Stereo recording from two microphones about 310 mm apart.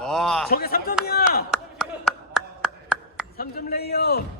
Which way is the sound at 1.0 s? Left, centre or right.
Left.